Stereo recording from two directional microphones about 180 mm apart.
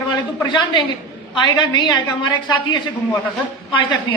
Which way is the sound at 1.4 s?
25° left (ahead or behind).